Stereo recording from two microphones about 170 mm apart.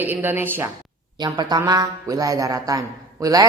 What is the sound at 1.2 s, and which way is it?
A man's voice, 25° right (ahead or behind).